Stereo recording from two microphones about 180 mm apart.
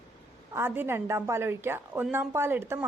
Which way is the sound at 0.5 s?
10° right (ahead or behind).